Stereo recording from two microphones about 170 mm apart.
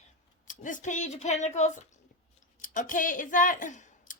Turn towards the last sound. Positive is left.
turn(degrees=50)  # may be behind; listen again after turning